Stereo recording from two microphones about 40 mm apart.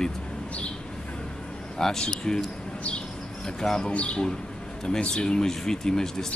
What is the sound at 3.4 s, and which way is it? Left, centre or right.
Speech, centre.